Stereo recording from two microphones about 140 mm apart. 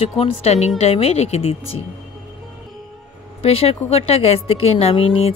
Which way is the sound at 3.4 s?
45° left (ahead or behind).